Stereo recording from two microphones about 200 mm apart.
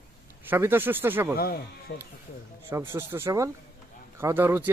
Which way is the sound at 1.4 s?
50° left (ahead or behind).